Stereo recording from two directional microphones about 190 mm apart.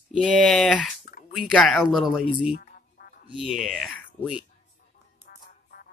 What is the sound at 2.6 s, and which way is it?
Music, 50° left (ahead or behind).